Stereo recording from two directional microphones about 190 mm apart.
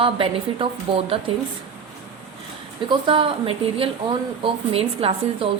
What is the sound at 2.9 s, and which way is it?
A woman's voice, 25° right (ahead or behind).